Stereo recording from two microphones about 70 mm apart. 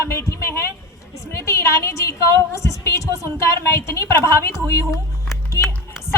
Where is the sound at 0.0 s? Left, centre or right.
Left.